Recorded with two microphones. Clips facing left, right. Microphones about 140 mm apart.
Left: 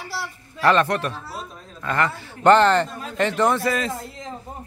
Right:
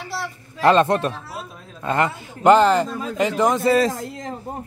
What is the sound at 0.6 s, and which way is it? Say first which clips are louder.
A man's voice: right 3 dB; 25° right (ahead or behind).